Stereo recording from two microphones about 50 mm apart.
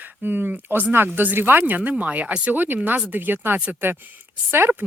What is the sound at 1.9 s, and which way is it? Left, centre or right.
Speech, right.